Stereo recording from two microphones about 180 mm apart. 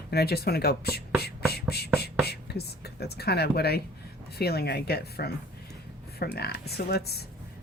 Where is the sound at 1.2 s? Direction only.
60° left (ahead or behind).